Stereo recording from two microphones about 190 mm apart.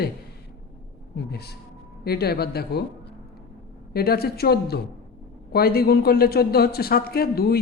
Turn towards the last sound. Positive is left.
turn(degrees=55)  # may be behind; listen again after turning